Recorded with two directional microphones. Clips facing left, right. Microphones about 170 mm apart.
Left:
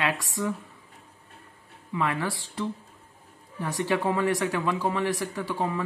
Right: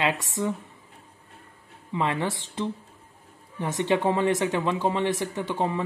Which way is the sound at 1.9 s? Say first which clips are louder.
Right 2 dB; 25° right (ahead or behind).